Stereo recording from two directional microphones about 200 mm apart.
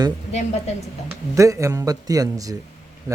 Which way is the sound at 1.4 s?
15° right (ahead or behind).